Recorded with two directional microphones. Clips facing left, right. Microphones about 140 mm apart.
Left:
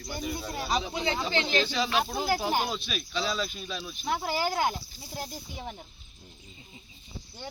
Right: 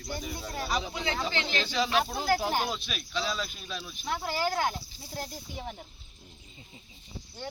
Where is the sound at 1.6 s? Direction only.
Centre (ahead or behind).